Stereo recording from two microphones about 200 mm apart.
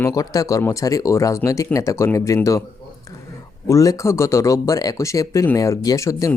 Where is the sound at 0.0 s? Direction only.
15° left (ahead or behind).